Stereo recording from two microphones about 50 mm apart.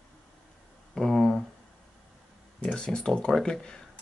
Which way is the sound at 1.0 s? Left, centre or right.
Centre.